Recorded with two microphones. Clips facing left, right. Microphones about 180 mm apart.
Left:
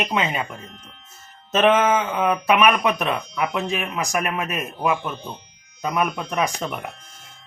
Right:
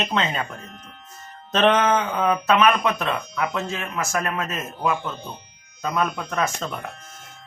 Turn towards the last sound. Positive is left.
turn(degrees=20)  # may be behind; listen again after turning